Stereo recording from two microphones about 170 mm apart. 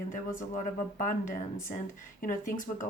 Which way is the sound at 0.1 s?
55° left (ahead or behind).